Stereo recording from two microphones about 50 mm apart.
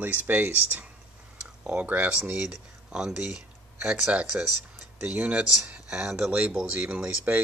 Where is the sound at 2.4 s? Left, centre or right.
Centre.